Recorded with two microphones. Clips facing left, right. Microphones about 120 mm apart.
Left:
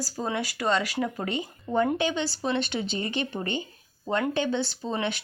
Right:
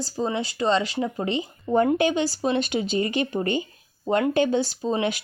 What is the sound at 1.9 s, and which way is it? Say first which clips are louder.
Speech: right 5 dB; 45° right (ahead or behind).